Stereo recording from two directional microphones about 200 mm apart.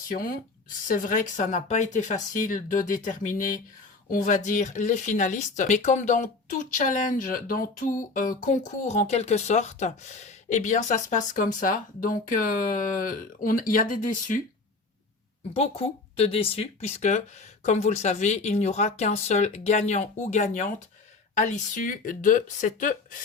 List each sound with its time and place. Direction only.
0.1 s speech: 45° left (ahead or behind)
15.5 s speech: 30° left (ahead or behind)